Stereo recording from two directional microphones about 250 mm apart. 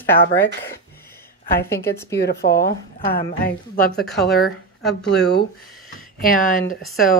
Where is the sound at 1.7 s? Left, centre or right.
Centre.